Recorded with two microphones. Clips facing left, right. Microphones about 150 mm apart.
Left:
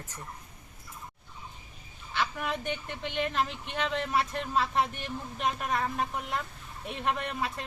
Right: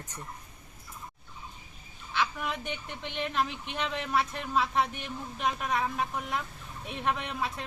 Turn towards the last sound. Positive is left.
turn(degrees=0)  # may be behind; listen again after turning